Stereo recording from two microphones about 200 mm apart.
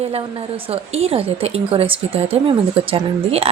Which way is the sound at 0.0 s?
30° right (ahead or behind).